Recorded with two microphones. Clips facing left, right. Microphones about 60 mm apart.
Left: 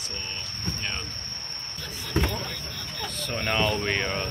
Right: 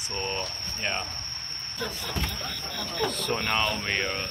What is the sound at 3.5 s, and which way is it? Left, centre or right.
Speech, right.